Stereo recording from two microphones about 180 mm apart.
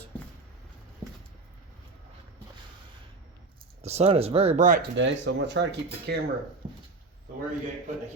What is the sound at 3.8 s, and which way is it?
Speech, 35° right (ahead or behind).